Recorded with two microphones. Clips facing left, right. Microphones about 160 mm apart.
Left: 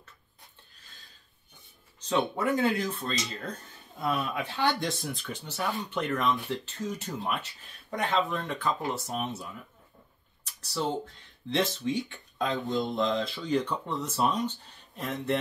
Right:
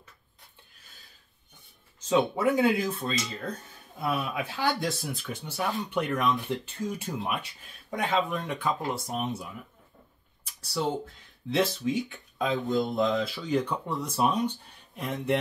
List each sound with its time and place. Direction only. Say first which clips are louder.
2.0 s speech: right 3 dB; 10° right (ahead or behind)
10.7 s speech: right 1 dB; 5° right (ahead or behind)